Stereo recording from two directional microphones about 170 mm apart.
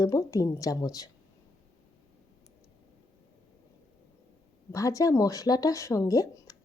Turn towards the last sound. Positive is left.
turn(degrees=20)  # may be behind; listen again after turning